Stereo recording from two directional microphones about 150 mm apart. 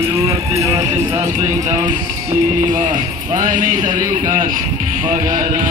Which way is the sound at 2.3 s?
20° right (ahead or behind).